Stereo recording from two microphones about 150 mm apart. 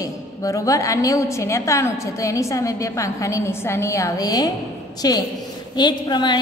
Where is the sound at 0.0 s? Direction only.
20° left (ahead or behind).